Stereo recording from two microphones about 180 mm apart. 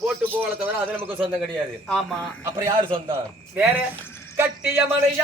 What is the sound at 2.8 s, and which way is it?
Speech, 25° right (ahead or behind).